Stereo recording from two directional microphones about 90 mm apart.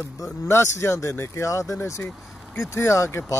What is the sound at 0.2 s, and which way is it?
Speech, 30° left (ahead or behind).